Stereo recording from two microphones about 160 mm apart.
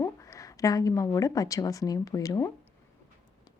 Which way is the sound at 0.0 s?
20° left (ahead or behind).